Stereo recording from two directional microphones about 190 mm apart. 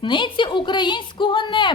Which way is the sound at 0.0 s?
25° left (ahead or behind).